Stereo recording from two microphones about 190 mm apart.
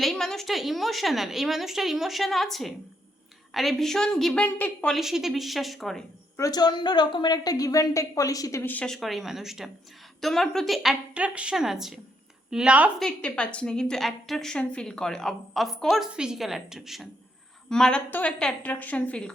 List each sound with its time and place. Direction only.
0.0 s a woman's voice: centre (ahead or behind)
6.3 s a woman's voice: 20° left (ahead or behind); by 13.1 s 5° right (ahead or behind)
13.1 s a woman's voice: 5° left (ahead or behind)